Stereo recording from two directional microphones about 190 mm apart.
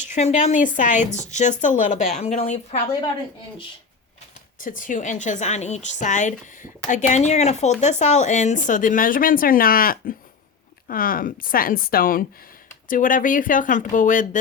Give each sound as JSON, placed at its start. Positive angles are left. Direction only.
{"t": 0.0, "sound": "a woman's voice", "side_deg": 40}
{"t": 4.6, "sound": "a woman's voice", "side_deg": 45}